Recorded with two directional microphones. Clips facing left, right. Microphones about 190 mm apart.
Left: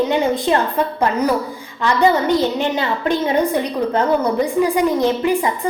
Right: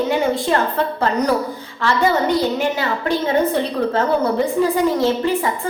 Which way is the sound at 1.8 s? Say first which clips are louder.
Left 2 dB; 20° left (ahead or behind).